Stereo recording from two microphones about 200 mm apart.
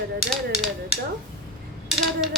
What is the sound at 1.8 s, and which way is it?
Mechanisms, centre (ahead or behind).